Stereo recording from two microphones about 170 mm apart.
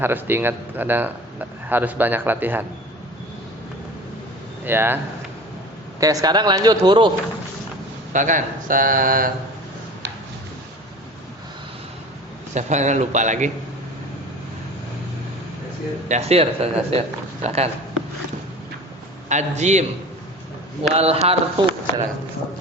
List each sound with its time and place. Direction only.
0.0 s speech: 10° right (ahead or behind)
4.6 s speech: 10° right (ahead or behind)
6.0 s speech: 20° right (ahead or behind)
8.1 s speech: 50° right (ahead or behind)
12.5 s a man's voice: 45° right (ahead or behind)
16.0 s speech: 40° right (ahead or behind)
19.3 s a man's voice: 45° right (ahead or behind)
20.9 s speech: 40° right (ahead or behind)